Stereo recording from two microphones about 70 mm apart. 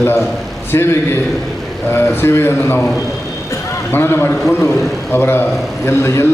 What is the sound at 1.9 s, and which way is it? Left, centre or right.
Speech, left.